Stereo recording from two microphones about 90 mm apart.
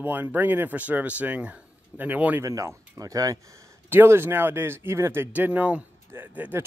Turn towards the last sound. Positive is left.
turn(degrees=-20)  # may be behind; listen again after turning